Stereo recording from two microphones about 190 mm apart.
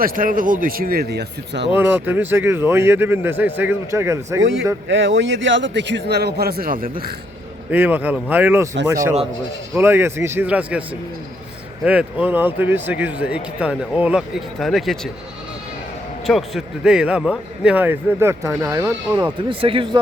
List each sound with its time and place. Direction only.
0.0 s speech: 45° right (ahead or behind); by 1.7 s 65° right (ahead or behind)
1.7 s speech: 10° right (ahead or behind)
4.9 s speech: 80° right; by 7.1 s 50° right (ahead or behind)
7.7 s speech: 10° right (ahead or behind)
9.7 s speech: 10° right (ahead or behind)
11.9 s speech: 5° right (ahead or behind)
16.2 s speech: centre (ahead or behind)
19.5 s speech: 25° right (ahead or behind)